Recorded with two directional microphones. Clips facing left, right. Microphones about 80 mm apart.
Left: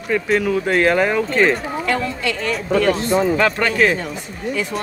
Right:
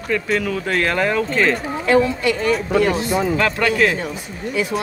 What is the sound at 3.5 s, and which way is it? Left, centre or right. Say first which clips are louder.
Speech: even; left.